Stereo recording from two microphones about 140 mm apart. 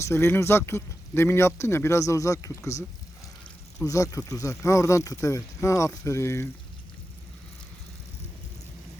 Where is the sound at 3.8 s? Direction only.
25° left (ahead or behind).